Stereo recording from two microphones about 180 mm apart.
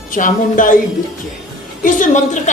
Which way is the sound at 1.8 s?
45° left (ahead or behind).